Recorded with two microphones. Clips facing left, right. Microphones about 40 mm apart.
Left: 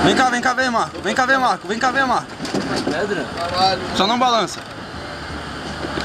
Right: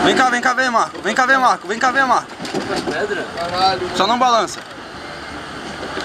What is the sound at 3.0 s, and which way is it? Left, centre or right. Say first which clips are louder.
Speech: right 1 dB; centre.